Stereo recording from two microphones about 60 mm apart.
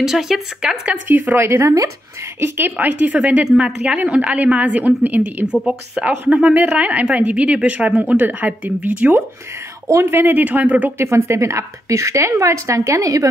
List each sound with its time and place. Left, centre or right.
0.0 s speech: centre
1.3 s speech: right
2.4 s speech: right
3.0 s a woman's voice: right
3.4 s a woman's voice: centre; by 5.5 s right
5.5 s a woman's voice: centre
9.8 s speech: right
11.0 s a woman's voice: right